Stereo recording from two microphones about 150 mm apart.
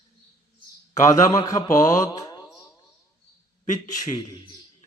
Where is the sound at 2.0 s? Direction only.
25° left (ahead or behind).